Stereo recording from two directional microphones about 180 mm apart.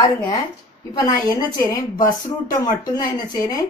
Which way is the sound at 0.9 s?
20° left (ahead or behind).